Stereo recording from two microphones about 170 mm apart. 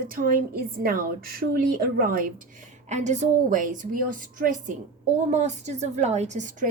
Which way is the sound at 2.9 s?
45° right (ahead or behind).